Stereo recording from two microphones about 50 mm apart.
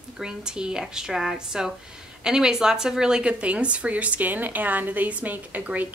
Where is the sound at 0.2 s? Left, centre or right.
Centre.